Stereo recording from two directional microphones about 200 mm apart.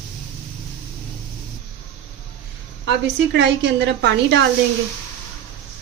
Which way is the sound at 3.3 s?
60° right (ahead or behind).